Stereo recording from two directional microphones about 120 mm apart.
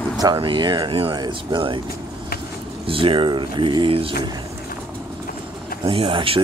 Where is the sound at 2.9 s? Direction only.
50° right (ahead or behind).